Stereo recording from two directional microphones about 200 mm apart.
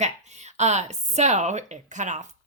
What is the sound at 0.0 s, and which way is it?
Speech, 35° right (ahead or behind).